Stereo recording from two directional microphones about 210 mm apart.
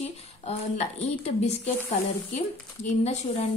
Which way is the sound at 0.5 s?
30° left (ahead or behind).